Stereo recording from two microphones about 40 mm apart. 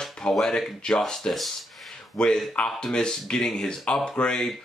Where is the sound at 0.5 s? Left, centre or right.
Centre.